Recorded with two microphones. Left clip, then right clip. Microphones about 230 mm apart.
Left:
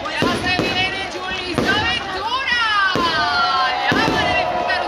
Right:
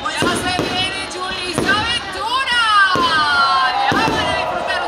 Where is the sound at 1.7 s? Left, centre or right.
Right.